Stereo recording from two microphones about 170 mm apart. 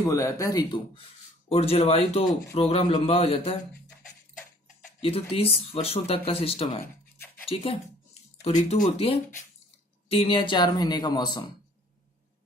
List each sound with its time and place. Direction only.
0.0 s speech: 15° left (ahead or behind)
1.5 s speech: 35° left (ahead or behind)
5.0 s speech: 35° left (ahead or behind)
10.0 s a man's voice: 35° left (ahead or behind)